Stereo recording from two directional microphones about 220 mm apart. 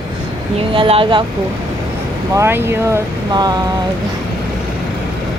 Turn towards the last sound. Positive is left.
turn(degrees=-20)  # may be behind; listen again after turning